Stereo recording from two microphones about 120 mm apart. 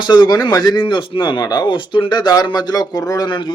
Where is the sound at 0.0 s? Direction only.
35° left (ahead or behind).